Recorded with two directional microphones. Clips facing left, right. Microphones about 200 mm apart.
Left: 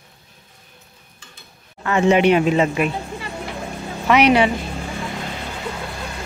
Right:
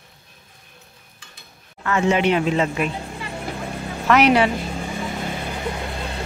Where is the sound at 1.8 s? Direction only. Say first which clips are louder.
Left 4 dB; 20° left (ahead or behind).